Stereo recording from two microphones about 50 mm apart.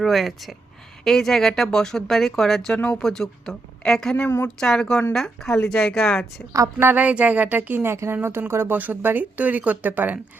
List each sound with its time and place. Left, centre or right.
0.0 s speech: centre
2.7 s speech: left
3.0 s speech: centre
6.9 s speech: right
7.9 s a woman's voice: right
8.1 s speech: right
8.7 s speech: right
9.4 s speech: right